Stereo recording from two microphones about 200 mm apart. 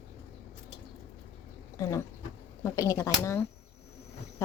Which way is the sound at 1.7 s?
15° left (ahead or behind).